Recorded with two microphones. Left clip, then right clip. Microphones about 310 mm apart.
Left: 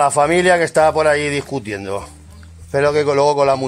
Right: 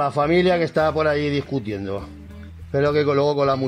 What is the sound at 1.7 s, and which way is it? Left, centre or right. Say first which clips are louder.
Speech: left 7 dB; left.